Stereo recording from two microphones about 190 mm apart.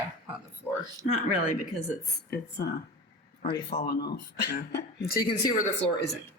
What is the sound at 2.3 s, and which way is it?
Speech, 60° left (ahead or behind).